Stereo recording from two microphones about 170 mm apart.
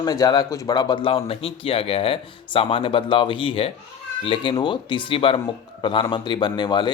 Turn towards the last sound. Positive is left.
turn(degrees=25)  # may be behind; listen again after turning